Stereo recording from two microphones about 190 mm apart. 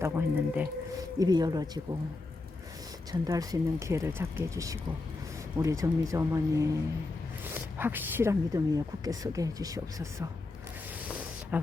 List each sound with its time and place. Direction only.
0.0 s a woman's voice: 10° right (ahead or behind)
1.2 s speech: 20° right (ahead or behind)
3.1 s a woman's voice: 20° right (ahead or behind)
11.5 s a woman's voice: 10° right (ahead or behind)